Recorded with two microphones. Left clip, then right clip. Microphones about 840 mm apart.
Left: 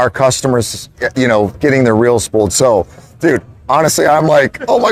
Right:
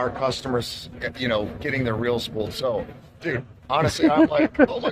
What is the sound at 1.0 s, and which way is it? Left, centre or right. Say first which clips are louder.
A man's voice: left 13 dB; left.